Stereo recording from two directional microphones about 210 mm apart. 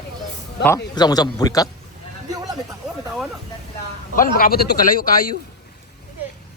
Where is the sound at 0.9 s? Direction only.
20° left (ahead or behind).